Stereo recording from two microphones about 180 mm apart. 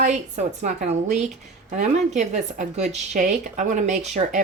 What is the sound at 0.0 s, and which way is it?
Speech, 40° right (ahead or behind).